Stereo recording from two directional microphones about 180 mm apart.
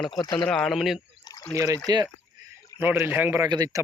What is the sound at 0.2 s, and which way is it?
Speech, 25° left (ahead or behind).